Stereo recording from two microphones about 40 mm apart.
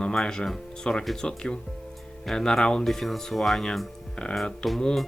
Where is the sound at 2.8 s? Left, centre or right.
Centre.